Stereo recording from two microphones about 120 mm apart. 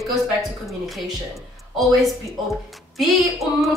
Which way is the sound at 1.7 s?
Centre (ahead or behind).